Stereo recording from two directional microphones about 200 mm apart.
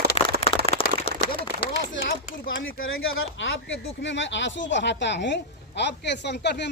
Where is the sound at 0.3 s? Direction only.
30° left (ahead or behind).